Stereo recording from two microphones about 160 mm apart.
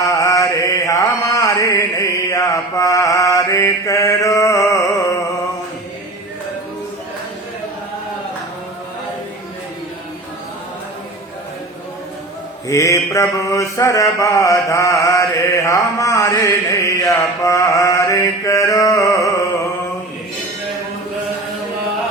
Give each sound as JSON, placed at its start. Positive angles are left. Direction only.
{"t": 0.0, "sound": "mantra", "side_deg": 20}
{"t": 12.6, "sound": "mantra", "side_deg": 20}